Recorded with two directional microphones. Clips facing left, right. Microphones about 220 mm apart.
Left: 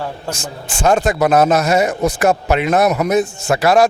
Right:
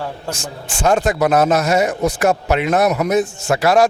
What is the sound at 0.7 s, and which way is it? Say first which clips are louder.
Speech: left 1 dB; 10° left (ahead or behind).